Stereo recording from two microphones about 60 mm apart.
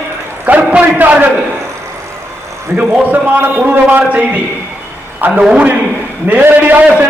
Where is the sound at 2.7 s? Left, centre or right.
Right.